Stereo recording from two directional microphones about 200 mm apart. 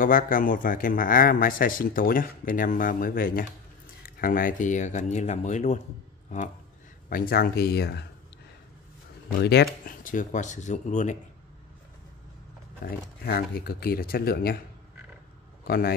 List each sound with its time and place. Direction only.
0.0 s speech: 45° left (ahead or behind)
7.1 s speech: 50° left (ahead or behind)
9.4 s speech: 55° left (ahead or behind)
9.8 s speech: 40° left (ahead or behind)
12.8 s speech: 50° left (ahead or behind)
15.6 s a man's voice: 50° left (ahead or behind)